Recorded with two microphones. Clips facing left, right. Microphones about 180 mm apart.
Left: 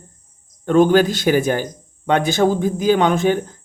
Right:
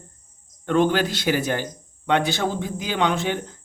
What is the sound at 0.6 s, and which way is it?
Speech, 45° left (ahead or behind).